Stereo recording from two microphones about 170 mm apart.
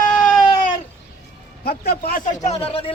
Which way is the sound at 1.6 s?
60° left (ahead or behind).